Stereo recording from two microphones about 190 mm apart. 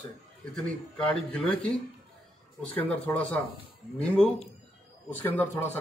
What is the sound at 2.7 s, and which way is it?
A man's voice, 10° left (ahead or behind).